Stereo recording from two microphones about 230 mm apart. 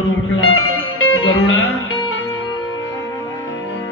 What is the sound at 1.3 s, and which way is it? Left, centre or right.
Music, left.